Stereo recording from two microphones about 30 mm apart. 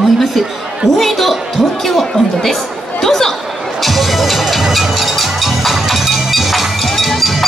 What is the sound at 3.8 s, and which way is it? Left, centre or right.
Music, centre.